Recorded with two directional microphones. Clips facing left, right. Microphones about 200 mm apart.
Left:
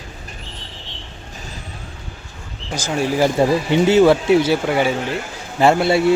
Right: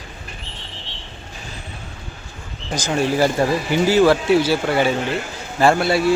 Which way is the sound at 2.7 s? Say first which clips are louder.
Even; 10° left (ahead or behind).